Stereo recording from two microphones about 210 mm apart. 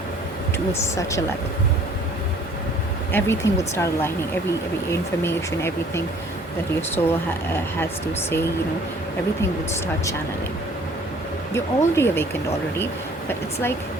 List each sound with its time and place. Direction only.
0.7 s speech: 15° left (ahead or behind)
3.1 s speech: 10° left (ahead or behind)
11.5 s speech: 10° left (ahead or behind)